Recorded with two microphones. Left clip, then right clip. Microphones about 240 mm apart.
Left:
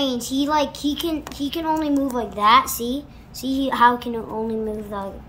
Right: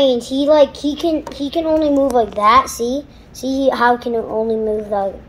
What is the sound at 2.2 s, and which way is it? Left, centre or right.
Speech, left.